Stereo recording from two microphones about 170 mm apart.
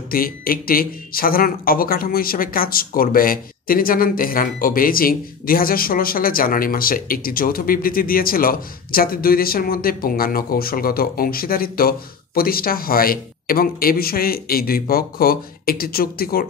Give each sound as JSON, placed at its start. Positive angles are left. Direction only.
{"t": 0.1, "sound": "speech", "side_deg": 60}